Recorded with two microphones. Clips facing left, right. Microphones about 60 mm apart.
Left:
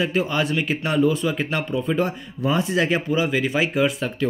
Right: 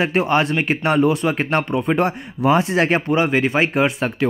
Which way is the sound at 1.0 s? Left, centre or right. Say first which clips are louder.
Right 3 dB; right.